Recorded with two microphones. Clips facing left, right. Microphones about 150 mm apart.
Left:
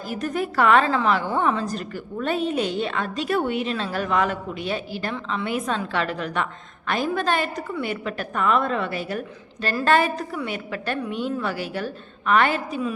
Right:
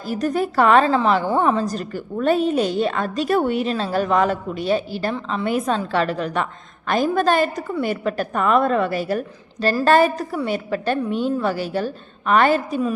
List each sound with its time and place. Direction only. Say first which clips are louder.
0.1 s a woman's voice: right 5 dB; 35° right (ahead or behind)